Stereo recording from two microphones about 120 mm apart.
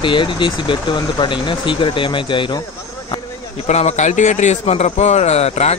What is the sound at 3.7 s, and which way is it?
A man's voice, 70° left (ahead or behind).